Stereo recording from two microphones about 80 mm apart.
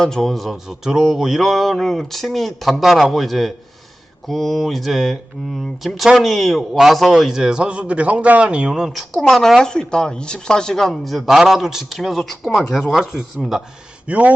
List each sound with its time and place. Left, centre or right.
0.0 s speech: centre
14.1 s a man's voice: centre